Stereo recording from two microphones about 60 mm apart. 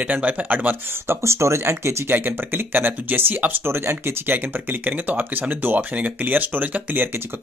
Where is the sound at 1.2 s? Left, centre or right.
Right.